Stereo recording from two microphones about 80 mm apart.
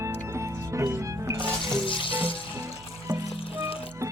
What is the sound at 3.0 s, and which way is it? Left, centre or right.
Music, right.